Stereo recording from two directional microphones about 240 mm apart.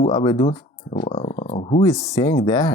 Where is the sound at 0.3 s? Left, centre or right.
Left.